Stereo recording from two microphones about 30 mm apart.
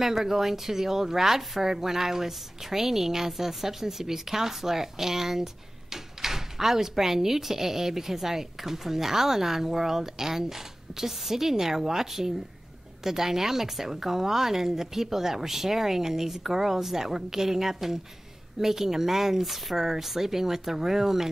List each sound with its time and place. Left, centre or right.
0.0 s speech: centre